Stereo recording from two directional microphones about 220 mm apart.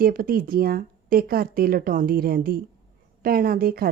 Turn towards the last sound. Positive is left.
turn(degrees=-45)  # may be behind; listen again after turning